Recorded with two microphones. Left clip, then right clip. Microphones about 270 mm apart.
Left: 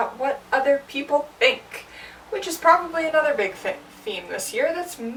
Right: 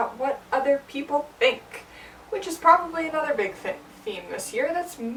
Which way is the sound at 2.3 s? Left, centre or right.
Centre.